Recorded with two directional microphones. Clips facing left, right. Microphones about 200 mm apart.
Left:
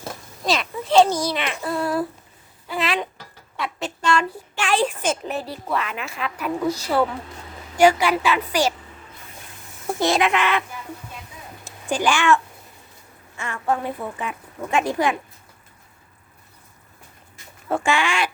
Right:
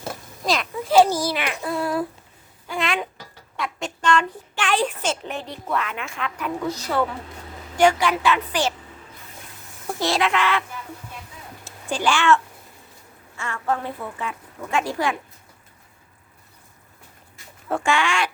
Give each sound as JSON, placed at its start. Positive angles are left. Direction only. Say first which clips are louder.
{"t": 0.4, "sound": "babbling", "louder": "even", "side_deg": 0}
{"t": 2.6, "sound": "a sound", "louder": "left 1 dB", "side_deg": 5}
{"t": 3.8, "sound": "a woman's voice", "louder": "even", "side_deg": 5}
{"t": 10.0, "sound": "speech", "louder": "left 2 dB", "side_deg": 20}
{"t": 11.6, "sound": "a sound", "louder": "left 2 dB", "side_deg": 15}
{"t": 13.3, "sound": "a woman's voice", "louder": "left 1 dB", "side_deg": 15}
{"t": 17.7, "sound": "speech", "louder": "left 1 dB", "side_deg": 5}